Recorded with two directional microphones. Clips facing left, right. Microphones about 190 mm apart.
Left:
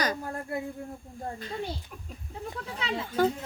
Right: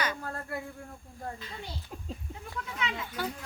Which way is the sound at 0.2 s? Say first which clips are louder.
Left 4 dB; 15° left (ahead or behind).